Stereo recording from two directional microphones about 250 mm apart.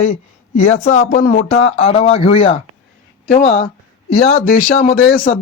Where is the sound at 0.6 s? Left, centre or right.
Left.